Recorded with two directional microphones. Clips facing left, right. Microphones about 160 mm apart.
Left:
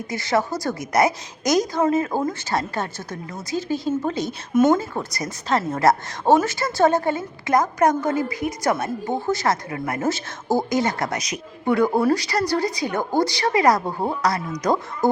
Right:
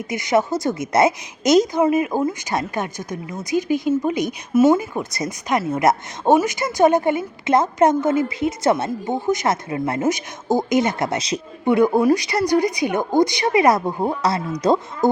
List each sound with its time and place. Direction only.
0.1 s speech: 20° right (ahead or behind)